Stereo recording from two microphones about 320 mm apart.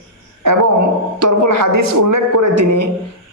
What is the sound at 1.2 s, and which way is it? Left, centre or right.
Speech, right.